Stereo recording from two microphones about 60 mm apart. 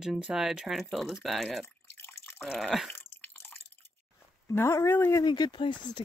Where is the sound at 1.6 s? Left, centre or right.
Left.